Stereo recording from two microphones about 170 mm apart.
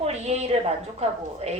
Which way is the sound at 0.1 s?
40° right (ahead or behind).